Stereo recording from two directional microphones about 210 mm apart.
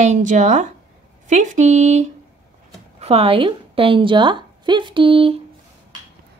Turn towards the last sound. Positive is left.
turn(degrees=-25)  # may be behind; listen again after turning